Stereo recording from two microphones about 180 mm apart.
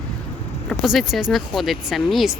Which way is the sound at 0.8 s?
Centre (ahead or behind).